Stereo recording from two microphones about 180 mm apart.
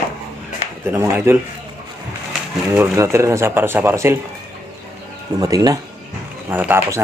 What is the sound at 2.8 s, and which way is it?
A man's voice, 15° right (ahead or behind).